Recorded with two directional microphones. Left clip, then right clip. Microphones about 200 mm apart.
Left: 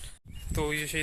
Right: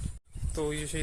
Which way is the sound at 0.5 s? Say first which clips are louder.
Left 3 dB; centre (ahead or behind).